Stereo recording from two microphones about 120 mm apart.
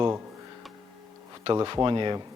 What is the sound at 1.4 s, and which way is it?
Speech, 40° right (ahead or behind).